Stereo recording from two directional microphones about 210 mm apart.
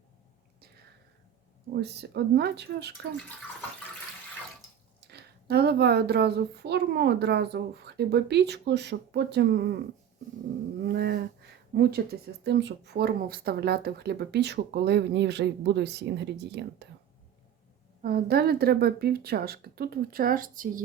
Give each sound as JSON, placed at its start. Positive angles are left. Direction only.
{"t": 1.7, "sound": "speech", "side_deg": -50}
{"t": 4.9, "sound": "speech", "side_deg": -50}
{"t": 10.8, "sound": "a sound", "side_deg": -50}
{"t": 11.7, "sound": "speech", "side_deg": -50}
{"t": 18.0, "sound": "speech", "side_deg": -45}